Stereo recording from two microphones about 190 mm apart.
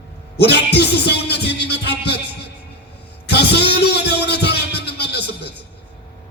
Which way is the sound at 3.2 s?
60° left (ahead or behind).